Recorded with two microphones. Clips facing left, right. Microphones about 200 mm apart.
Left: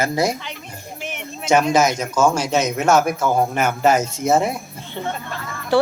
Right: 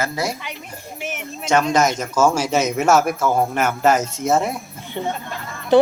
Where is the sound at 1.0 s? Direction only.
5° right (ahead or behind).